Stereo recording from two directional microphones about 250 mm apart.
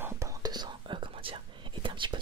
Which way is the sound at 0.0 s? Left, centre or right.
Centre.